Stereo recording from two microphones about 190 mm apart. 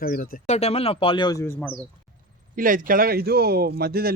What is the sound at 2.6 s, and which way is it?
Speech, 45° right (ahead or behind).